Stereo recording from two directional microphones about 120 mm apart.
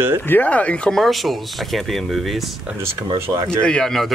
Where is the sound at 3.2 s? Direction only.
25° right (ahead or behind).